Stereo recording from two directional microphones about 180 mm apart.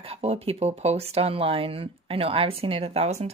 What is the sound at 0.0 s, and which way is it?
A woman's voice, 35° right (ahead or behind).